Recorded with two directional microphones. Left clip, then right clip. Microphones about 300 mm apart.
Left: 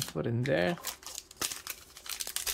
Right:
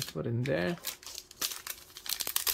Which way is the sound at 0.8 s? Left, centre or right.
Centre.